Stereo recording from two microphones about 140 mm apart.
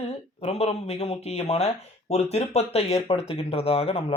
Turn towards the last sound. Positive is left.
turn(degrees=45)  # may be behind; listen again after turning